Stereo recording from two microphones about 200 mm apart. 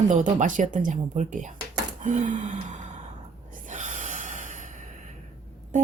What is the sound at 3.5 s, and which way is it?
Gasp, 40° right (ahead or behind).